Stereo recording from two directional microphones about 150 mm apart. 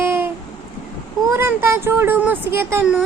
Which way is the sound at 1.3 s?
15° right (ahead or behind).